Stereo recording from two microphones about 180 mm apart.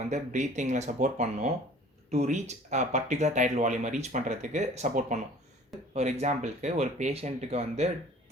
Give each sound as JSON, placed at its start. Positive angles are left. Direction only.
{"t": 0.1, "sound": "speech", "side_deg": -40}